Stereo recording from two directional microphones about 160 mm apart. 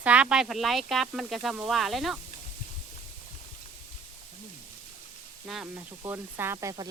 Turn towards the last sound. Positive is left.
turn(degrees=-20)  # may be behind; listen again after turning